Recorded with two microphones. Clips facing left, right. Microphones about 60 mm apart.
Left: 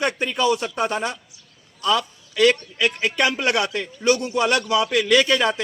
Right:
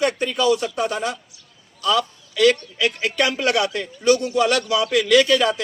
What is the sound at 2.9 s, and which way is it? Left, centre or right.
A man's voice, left.